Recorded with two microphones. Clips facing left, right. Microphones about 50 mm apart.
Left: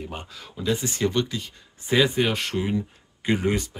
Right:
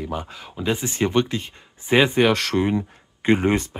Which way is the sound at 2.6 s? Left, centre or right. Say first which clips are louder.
Right 4 dB; right.